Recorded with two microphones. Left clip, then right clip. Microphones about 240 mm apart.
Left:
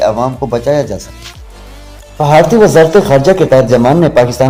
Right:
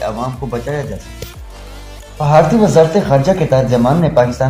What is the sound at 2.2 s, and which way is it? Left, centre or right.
A man's voice, left.